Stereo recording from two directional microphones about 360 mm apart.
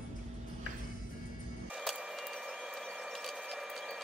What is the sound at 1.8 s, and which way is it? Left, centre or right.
Printer, centre.